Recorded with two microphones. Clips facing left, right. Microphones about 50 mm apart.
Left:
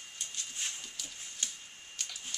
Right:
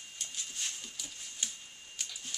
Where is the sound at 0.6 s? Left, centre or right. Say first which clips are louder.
Left 1 dB; centre.